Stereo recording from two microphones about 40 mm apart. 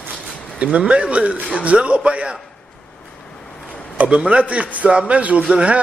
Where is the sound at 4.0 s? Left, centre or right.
Right.